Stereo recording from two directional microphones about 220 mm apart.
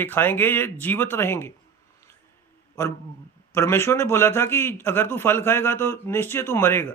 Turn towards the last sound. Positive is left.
turn(degrees=10)  # may be behind; listen again after turning